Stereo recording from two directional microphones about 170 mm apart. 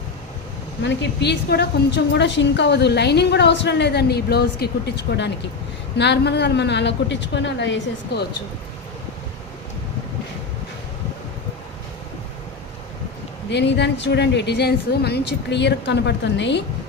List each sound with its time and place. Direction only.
0.8 s a woman's voice: 85° left
13.5 s a woman's voice: 90° left